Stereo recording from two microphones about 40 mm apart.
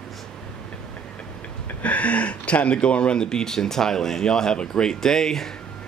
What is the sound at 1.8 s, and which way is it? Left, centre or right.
Speech, left.